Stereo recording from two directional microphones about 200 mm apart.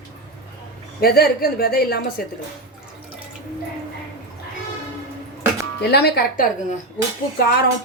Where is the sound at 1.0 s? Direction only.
50° left (ahead or behind).